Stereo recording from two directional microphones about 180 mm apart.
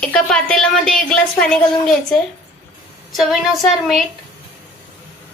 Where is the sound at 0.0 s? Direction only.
5° left (ahead or behind).